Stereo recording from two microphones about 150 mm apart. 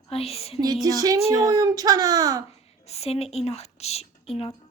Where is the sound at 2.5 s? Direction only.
45° left (ahead or behind).